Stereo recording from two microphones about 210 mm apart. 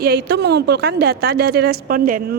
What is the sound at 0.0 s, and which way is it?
A woman's voice, 50° right (ahead or behind).